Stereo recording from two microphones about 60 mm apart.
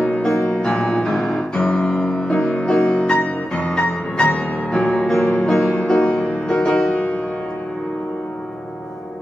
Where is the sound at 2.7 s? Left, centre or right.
Centre.